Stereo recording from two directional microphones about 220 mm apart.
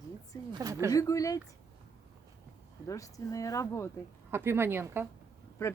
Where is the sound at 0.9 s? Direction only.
15° left (ahead or behind).